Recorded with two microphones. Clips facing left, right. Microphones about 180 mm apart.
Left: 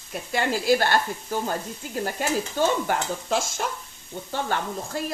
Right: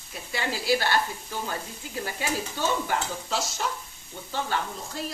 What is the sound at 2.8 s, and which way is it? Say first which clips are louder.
Speech: left 3 dB; 50° left (ahead or behind).